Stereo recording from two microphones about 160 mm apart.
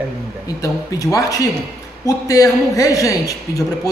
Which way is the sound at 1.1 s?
20° left (ahead or behind).